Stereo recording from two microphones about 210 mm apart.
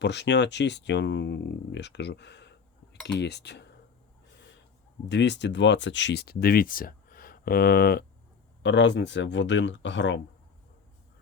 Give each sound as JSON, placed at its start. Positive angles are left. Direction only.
{"t": 0.0, "sound": "speech", "side_deg": 55}
{"t": 5.0, "sound": "speech", "side_deg": 55}
{"t": 8.6, "sound": "speech", "side_deg": 55}